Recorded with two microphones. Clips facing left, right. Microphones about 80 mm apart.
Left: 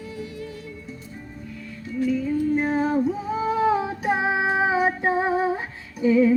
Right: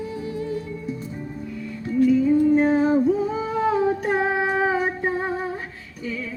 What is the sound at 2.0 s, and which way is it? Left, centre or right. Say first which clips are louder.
Music: right 6 dB; centre.